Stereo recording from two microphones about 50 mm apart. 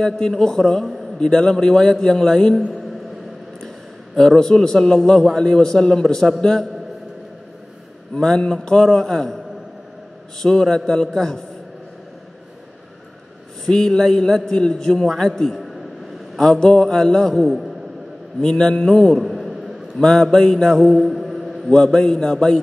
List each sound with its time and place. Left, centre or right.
0.0 s a man's voice: centre
3.6 s a man's voice: centre
8.2 s a man's voice: centre
10.4 s a man's voice: centre
13.7 s a man's voice: centre
20.0 s a man's voice: centre
20.8 s mantra: centre
21.7 s a man's voice: centre